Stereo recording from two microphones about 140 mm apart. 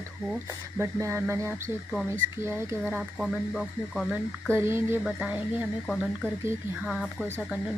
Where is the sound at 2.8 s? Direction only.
Centre (ahead or behind).